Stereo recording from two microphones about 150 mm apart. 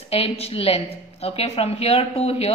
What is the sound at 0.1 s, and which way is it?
A woman's voice, 40° left (ahead or behind).